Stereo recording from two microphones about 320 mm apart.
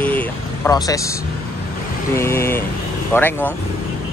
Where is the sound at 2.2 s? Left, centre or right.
Centre.